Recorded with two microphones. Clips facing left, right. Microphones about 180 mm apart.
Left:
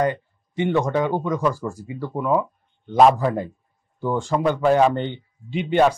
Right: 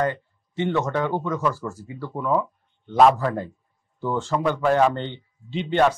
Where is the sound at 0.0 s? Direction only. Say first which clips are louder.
Left 2 dB; 15° left (ahead or behind).